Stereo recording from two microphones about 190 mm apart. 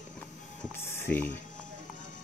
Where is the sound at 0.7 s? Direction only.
15° left (ahead or behind).